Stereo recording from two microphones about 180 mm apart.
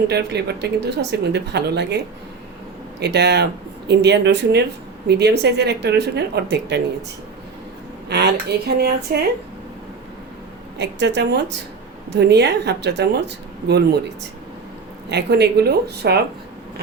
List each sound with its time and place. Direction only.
0.1 s speech: 65° right (ahead or behind)
3.0 s speech: 70° right (ahead or behind)
8.1 s speech: 65° right (ahead or behind)
10.8 s speech: 70° right (ahead or behind)
15.1 s speech: 65° right (ahead or behind)